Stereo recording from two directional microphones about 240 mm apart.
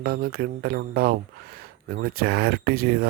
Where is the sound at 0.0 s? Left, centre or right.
Right.